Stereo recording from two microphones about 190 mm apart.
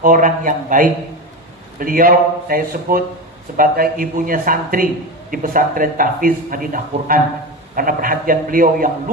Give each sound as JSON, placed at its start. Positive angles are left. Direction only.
{"t": 0.0, "sound": "speech", "side_deg": -45}